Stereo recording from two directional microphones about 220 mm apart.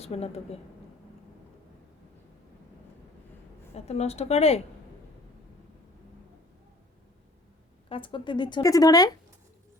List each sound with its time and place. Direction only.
0.0 s a woman's voice: 30° left (ahead or behind)
3.8 s a woman's voice: 30° left (ahead or behind)
7.9 s a woman's voice: 25° left (ahead or behind)